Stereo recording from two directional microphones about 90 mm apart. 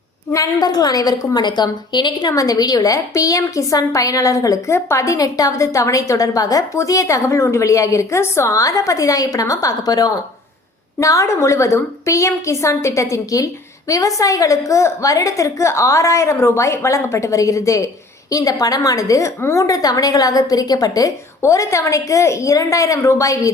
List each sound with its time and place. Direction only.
0.3 s a woman's voice: 45° left (ahead or behind)
2.3 s a woman's voice: 40° left (ahead or behind)